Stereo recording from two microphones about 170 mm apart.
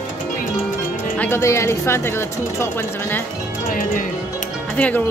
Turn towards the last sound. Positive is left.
turn(degrees=10)  # may be behind; listen again after turning